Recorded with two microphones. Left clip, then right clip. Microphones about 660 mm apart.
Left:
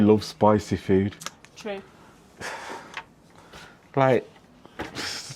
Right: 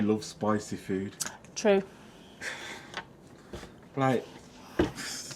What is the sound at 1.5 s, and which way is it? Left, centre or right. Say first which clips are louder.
Speech: right 11 dB; right.